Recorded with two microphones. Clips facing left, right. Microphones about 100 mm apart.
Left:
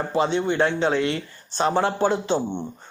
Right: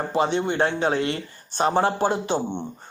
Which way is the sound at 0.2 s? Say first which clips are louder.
Left 1 dB; 50° right (ahead or behind).